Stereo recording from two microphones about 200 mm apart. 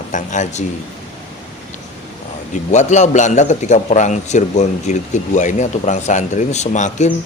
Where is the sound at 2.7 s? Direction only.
35° left (ahead or behind).